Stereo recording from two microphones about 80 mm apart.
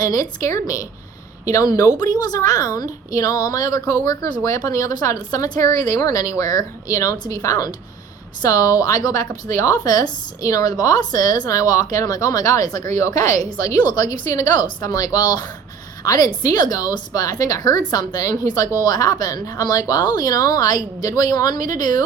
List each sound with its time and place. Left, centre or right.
0.0 s a woman's voice: left